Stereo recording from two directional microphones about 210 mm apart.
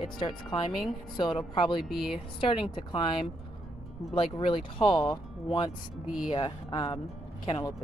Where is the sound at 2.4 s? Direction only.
25° left (ahead or behind).